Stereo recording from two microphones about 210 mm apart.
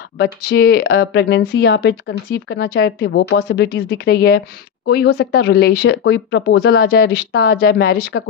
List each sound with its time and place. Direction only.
0.2 s speech: 50° left (ahead or behind)